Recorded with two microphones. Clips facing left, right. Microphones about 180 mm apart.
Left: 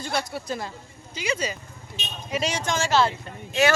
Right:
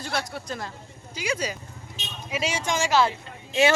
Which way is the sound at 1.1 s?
10° right (ahead or behind).